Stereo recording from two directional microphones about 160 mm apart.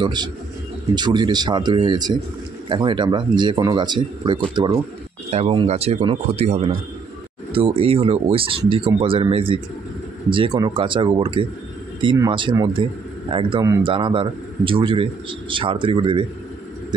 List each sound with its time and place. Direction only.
0.0 s a man's voice: 25° right (ahead or behind)